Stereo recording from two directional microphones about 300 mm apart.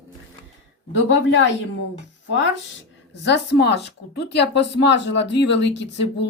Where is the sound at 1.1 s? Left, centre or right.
Left.